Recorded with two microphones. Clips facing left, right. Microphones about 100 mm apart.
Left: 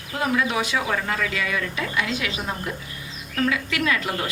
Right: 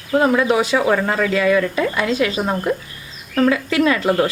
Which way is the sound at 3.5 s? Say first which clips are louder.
Right 7 dB; 35° right (ahead or behind).